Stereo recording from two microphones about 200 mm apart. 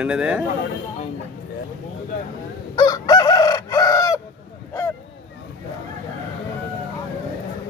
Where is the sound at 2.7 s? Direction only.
20° left (ahead or behind).